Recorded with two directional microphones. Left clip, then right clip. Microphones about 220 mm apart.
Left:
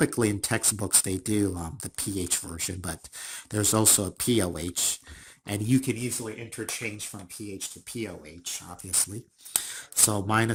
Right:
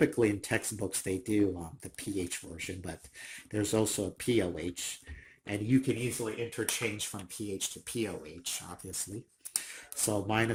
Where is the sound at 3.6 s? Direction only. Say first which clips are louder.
Left 6 dB; 50° left (ahead or behind).